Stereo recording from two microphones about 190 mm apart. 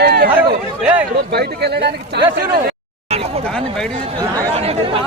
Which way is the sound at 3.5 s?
5° left (ahead or behind).